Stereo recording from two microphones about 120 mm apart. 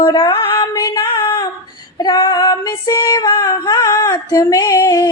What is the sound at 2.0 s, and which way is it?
Female singing, 35° left (ahead or behind).